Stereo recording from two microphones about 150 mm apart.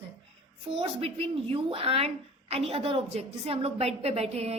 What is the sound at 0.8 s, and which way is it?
A woman's voice, 40° right (ahead or behind).